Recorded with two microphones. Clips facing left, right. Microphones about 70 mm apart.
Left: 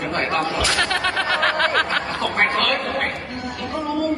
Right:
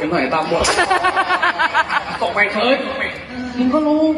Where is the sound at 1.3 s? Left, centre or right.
Centre.